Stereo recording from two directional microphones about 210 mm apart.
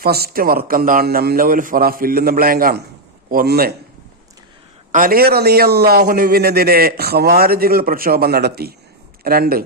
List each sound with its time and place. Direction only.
0.0 s a man's voice: 45° right (ahead or behind)
4.9 s a man's voice: 40° right (ahead or behind)